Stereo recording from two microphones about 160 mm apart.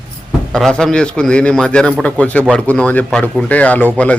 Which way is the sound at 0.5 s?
5° left (ahead or behind).